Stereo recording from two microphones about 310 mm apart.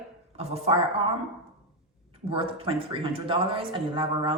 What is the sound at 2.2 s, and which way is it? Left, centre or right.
A man's voice, centre.